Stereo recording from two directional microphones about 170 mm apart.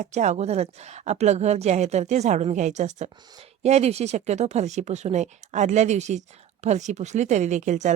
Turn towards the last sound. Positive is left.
turn(degrees=-45)  # may be behind; listen again after turning